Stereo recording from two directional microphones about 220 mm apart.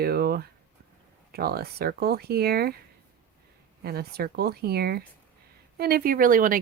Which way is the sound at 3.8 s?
45° right (ahead or behind).